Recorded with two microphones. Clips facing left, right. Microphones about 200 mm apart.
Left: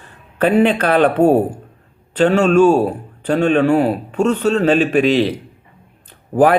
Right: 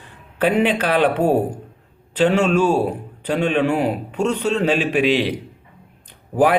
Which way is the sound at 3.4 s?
45° left (ahead or behind).